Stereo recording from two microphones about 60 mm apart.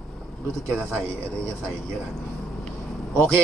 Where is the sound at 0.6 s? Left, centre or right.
Right.